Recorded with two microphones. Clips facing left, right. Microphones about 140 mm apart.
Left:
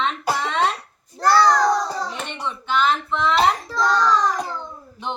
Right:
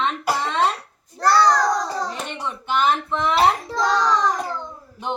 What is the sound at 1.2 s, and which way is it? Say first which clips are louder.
Speech: even; 5° left (ahead or behind).